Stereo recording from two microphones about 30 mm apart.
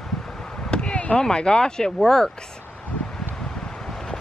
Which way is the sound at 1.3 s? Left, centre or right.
Left.